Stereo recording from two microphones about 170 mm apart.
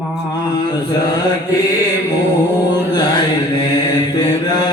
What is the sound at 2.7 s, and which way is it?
Mantra, 25° left (ahead or behind).